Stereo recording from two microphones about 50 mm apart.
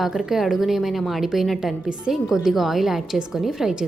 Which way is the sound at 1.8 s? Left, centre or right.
Centre.